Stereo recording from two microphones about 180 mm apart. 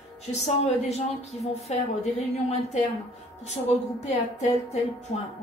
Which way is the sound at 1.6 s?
35° left (ahead or behind).